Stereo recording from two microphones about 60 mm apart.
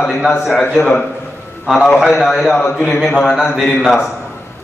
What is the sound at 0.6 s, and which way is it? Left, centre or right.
Speech, left.